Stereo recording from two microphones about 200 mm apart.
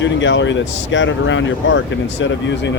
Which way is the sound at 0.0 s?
65° left (ahead or behind).